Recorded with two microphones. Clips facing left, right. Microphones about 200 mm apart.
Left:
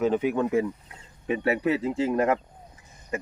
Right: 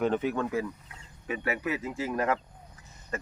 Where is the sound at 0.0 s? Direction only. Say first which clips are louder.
Left 4 dB; 10° left (ahead or behind); by 2.4 s 25° left (ahead or behind).